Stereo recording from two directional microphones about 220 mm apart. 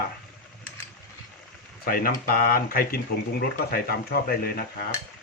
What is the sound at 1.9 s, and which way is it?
Speech, 40° left (ahead or behind).